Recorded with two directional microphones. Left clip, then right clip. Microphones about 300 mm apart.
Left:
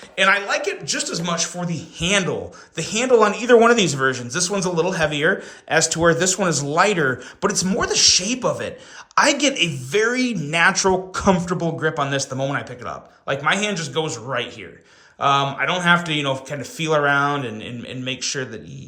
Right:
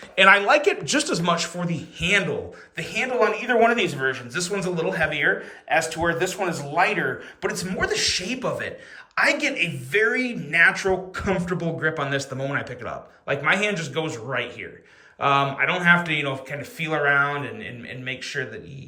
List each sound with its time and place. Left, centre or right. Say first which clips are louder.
0.2 s speech: right 2 dB; centre